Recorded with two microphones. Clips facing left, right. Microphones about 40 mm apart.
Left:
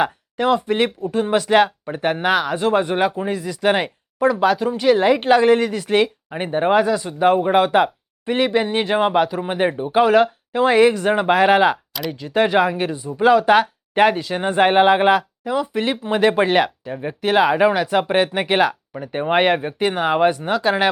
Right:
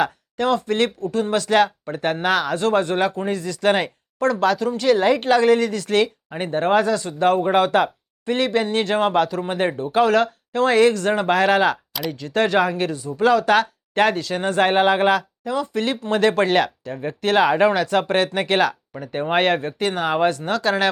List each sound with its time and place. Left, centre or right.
0.0 s speech: centre